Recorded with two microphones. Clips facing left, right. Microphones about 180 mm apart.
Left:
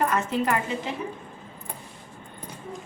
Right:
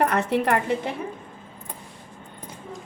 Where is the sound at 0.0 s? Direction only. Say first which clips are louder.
Right 3 dB; 70° right (ahead or behind).